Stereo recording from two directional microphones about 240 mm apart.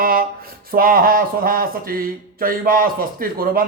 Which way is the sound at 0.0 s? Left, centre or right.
Right.